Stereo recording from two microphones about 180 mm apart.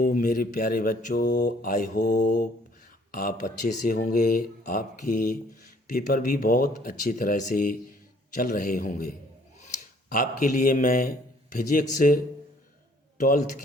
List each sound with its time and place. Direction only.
0.0 s mantra: 45° left (ahead or behind)
9.6 s a man's voice: 45° left (ahead or behind)